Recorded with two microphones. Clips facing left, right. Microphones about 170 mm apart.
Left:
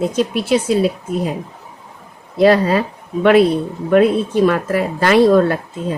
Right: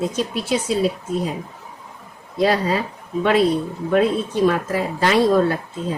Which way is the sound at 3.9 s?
65° left (ahead or behind).